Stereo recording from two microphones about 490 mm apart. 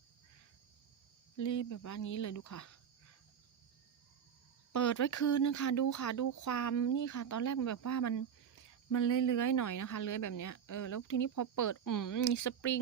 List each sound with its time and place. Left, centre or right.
1.4 s speech: left
4.7 s speech: left